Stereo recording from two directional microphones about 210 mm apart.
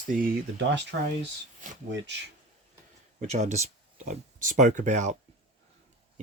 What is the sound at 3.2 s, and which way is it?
Speech, 30° right (ahead or behind).